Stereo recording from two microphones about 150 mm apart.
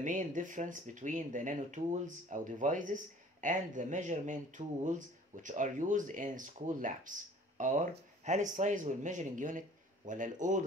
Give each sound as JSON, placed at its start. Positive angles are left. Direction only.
{"t": 0.0, "sound": "speech", "side_deg": -60}